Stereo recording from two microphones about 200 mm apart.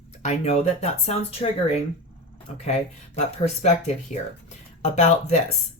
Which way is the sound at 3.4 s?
35° left (ahead or behind).